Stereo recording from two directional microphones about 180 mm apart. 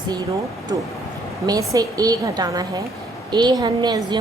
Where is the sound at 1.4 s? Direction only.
20° right (ahead or behind).